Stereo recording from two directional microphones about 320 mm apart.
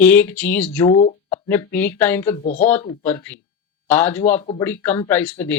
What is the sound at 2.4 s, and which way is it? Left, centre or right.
Speech, left.